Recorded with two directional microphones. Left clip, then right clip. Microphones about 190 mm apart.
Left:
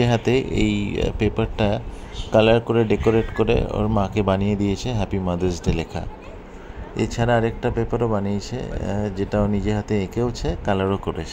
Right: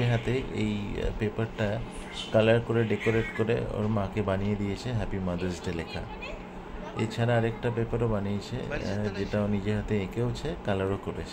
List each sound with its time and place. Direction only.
0.0 s speech: 40° left (ahead or behind); by 11.2 s 25° left (ahead or behind)